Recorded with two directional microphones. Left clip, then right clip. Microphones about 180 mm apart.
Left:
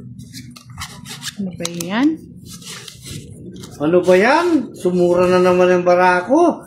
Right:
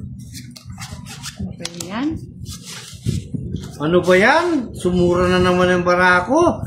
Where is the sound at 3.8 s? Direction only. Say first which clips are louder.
Left 1 dB; 30° right (ahead or behind).